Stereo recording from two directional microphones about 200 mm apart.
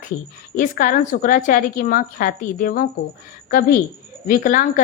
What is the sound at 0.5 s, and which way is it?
A woman's voice, 45° left (ahead or behind).